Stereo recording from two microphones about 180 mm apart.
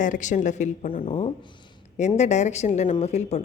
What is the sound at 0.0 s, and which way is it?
Speech, 45° left (ahead or behind).